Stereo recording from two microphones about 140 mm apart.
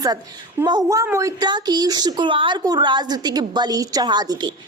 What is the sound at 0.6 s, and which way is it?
A woman's voice, 30° right (ahead or behind).